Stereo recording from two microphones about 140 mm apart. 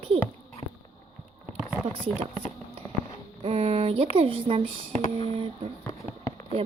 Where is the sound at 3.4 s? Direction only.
45° right (ahead or behind).